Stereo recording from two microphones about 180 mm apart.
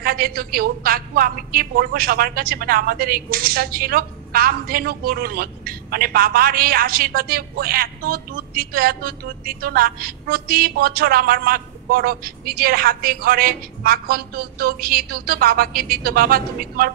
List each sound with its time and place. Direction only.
0.0 s a woman's voice: 55° right (ahead or behind)